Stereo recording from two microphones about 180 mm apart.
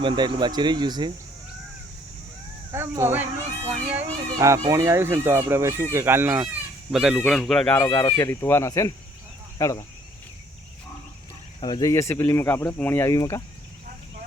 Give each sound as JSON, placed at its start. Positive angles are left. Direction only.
{"t": 0.0, "sound": "speech", "side_deg": -25}
{"t": 2.7, "sound": "speech", "side_deg": -15}
{"t": 7.8, "sound": "speech", "side_deg": 15}
{"t": 11.6, "sound": "speech", "side_deg": 20}